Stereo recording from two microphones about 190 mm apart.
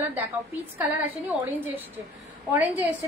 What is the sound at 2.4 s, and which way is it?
Speech, 10° right (ahead or behind).